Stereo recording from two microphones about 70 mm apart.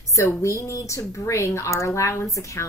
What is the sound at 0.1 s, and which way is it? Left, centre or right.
A woman's voice, left.